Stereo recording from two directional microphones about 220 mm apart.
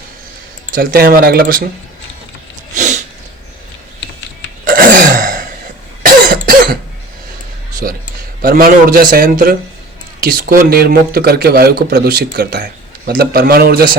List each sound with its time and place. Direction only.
0.7 s a man's voice: 40° right (ahead or behind)
2.7 s sneeze: 35° right (ahead or behind)
4.6 s throat clearing: 40° right (ahead or behind)
6.0 s cough: 45° right (ahead or behind)
7.8 s a sound: 40° right (ahead or behind)
8.4 s a man's voice: 40° right (ahead or behind)